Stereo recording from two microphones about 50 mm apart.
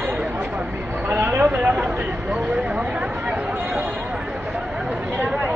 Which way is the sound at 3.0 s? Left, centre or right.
Right.